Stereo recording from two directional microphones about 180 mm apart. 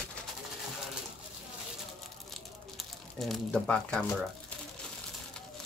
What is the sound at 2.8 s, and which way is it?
Speech, centre (ahead or behind).